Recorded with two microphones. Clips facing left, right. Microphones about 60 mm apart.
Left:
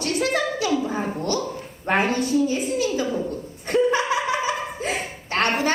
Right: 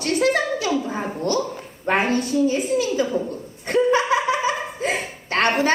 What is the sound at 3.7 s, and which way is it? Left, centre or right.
Laughter, right.